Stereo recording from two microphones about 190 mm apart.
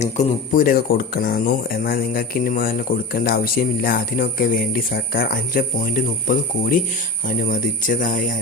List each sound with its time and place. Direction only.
0.0 s speech: 40° left (ahead or behind)